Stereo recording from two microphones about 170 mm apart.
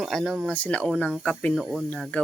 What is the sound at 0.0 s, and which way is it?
Speech, centre (ahead or behind).